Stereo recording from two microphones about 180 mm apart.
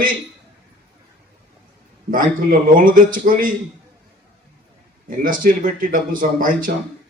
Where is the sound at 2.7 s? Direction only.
50° right (ahead or behind).